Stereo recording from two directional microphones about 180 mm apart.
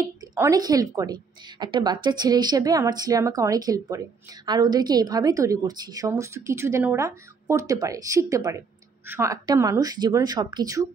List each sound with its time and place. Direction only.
0.0 s a woman's voice: 20° right (ahead or behind)